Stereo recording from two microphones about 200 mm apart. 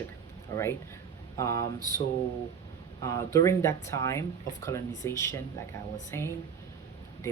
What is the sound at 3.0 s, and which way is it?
Speech, 15° left (ahead or behind).